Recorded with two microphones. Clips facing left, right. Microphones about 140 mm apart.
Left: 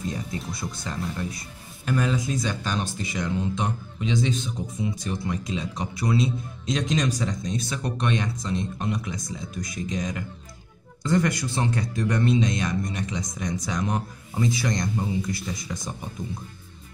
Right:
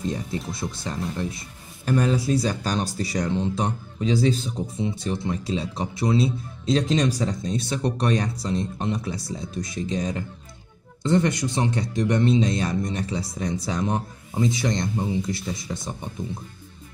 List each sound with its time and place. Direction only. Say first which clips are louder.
0.5 s speech: right 2 dB; 25° right (ahead or behind)